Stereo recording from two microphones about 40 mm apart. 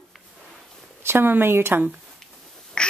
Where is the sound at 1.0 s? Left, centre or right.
Right.